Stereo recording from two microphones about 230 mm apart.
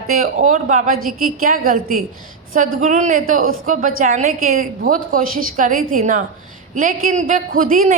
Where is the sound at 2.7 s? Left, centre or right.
Right.